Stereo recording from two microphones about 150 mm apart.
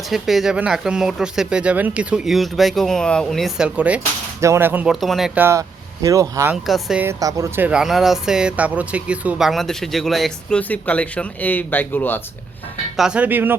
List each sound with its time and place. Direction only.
0.1 s speech: centre (ahead or behind)
4.9 s speech: centre (ahead or behind)
5.4 s speech: 20° right (ahead or behind)
6.7 s speech: centre (ahead or behind)
7.0 s speech: 20° right (ahead or behind); by 12.2 s 15° left (ahead or behind)
13.0 s speech: 5° right (ahead or behind)